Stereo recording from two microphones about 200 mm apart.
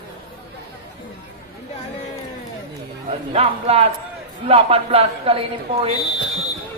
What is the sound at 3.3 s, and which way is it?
Speech, 30° right (ahead or behind).